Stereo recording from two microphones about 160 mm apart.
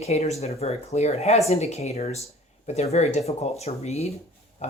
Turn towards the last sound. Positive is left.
turn(degrees=40)  # may be behind; listen again after turning